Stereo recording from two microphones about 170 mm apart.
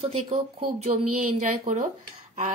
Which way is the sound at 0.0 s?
35° right (ahead or behind).